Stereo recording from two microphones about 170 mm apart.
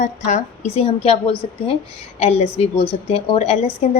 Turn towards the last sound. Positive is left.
turn(degrees=40)  # may be behind; listen again after turning